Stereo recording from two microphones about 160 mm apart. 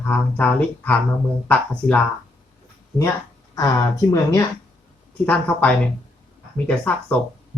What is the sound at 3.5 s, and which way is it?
Speech, 20° left (ahead or behind).